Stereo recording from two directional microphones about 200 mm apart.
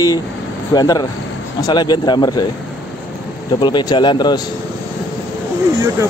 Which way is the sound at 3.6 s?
20° left (ahead or behind).